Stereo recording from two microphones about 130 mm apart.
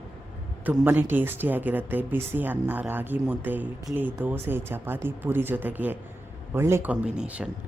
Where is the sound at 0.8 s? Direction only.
15° right (ahead or behind).